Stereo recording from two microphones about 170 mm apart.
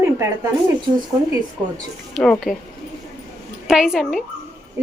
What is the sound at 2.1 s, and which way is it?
Speech, 5° left (ahead or behind).